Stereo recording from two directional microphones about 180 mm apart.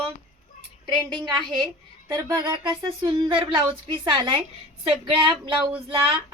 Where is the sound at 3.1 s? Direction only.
25° right (ahead or behind).